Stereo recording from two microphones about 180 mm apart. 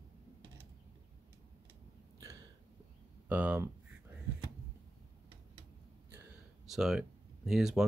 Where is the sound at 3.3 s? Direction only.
10° right (ahead or behind).